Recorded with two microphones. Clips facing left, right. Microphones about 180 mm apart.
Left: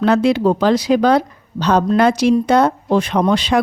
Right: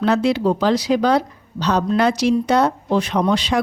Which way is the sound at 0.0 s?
55° left (ahead or behind).